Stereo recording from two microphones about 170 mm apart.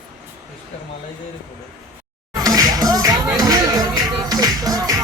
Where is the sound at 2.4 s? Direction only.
20° right (ahead or behind).